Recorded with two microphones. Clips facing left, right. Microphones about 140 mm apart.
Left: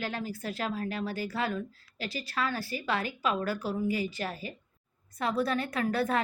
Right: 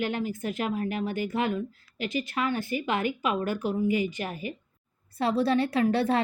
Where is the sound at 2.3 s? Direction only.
20° right (ahead or behind).